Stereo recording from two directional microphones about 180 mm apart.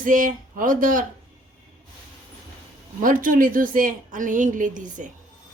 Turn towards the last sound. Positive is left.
turn(degrees=-45)  # may be behind; listen again after turning